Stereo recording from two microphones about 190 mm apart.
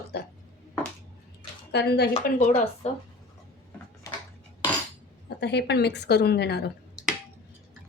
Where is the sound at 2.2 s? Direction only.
40° left (ahead or behind).